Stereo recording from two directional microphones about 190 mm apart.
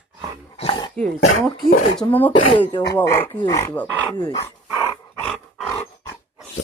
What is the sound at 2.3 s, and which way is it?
Speech, 30° left (ahead or behind).